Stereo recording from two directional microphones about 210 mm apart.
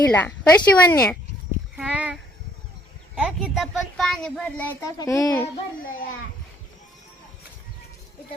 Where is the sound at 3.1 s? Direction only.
5° right (ahead or behind); by 5.4 s 15° left (ahead or behind).